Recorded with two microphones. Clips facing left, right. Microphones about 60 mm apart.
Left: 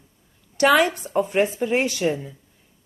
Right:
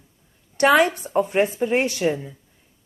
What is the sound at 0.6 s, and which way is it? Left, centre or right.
Speech, centre.